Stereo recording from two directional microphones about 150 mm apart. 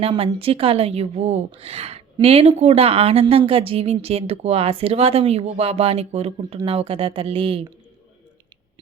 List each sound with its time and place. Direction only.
0.0 s a woman's voice: 40° right (ahead or behind)